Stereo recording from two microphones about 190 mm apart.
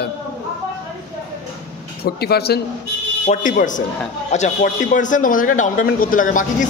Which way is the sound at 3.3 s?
45° left (ahead or behind).